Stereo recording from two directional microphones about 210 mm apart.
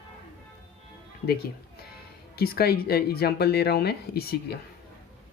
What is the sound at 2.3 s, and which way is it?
Speech, 45° left (ahead or behind).